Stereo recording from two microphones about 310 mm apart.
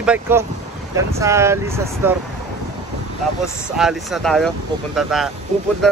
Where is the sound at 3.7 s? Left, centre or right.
Centre.